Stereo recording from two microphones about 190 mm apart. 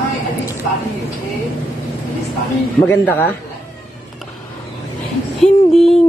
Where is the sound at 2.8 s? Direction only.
10° left (ahead or behind).